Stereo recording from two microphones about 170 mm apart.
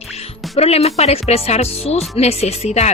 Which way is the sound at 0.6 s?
35° left (ahead or behind).